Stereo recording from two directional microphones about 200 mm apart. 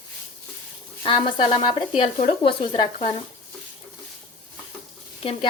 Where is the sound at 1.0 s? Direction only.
25° left (ahead or behind).